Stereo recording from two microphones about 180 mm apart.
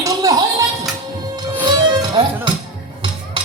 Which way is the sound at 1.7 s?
25° right (ahead or behind).